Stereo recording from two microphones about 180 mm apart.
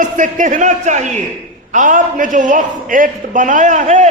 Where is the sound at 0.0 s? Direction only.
45° right (ahead or behind).